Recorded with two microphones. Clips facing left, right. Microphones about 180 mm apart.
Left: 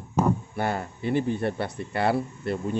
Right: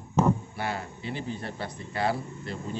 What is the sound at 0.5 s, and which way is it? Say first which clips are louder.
Speech: left 5 dB; 50° left (ahead or behind).